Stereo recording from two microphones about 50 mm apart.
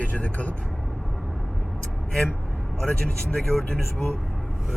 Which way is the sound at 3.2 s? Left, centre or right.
Left.